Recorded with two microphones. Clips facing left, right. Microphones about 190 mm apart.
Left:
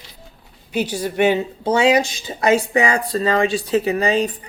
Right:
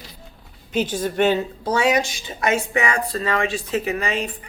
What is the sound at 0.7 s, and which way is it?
Speech, 10° left (ahead or behind).